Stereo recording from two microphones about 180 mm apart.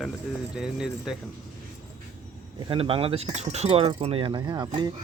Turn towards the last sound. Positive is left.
turn(degrees=-20)  # may be behind; listen again after turning